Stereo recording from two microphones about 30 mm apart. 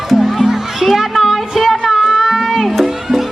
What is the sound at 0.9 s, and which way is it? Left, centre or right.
Music, centre.